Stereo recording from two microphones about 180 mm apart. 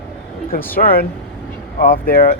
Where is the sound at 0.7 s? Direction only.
55° left (ahead or behind).